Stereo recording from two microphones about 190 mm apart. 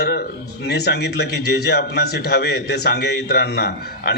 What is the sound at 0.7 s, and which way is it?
A man's voice, 60° left (ahead or behind).